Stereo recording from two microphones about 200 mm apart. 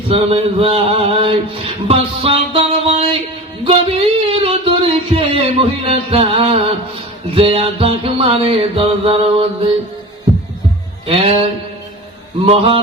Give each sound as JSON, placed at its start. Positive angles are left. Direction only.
{"t": 0.1, "sound": "music", "side_deg": -30}
{"t": 3.6, "sound": "a sound", "side_deg": -30}
{"t": 7.3, "sound": "music", "side_deg": -30}
{"t": 11.0, "sound": "speech", "side_deg": -30}
{"t": 12.5, "sound": "music", "side_deg": -30}